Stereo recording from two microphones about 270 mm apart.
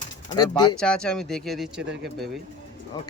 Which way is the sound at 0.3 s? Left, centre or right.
Centre.